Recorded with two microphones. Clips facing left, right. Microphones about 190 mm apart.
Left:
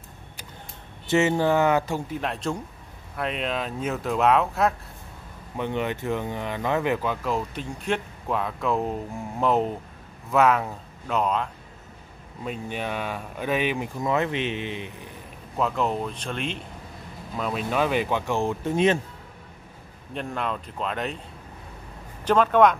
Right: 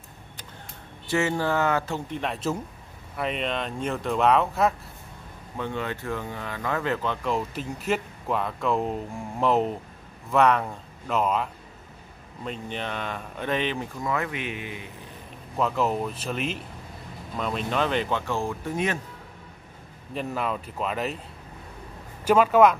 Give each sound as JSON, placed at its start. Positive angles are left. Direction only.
{"t": 1.0, "sound": "speech", "side_deg": 20}
{"t": 5.6, "sound": "speech", "side_deg": 20}
{"t": 7.2, "sound": "speech", "side_deg": 0}
{"t": 12.4, "sound": "speech", "side_deg": 10}
{"t": 14.0, "sound": "speech", "side_deg": 25}
{"t": 15.5, "sound": "speech", "side_deg": 0}
{"t": 20.2, "sound": "speech", "side_deg": -5}
{"t": 22.2, "sound": "speech", "side_deg": -10}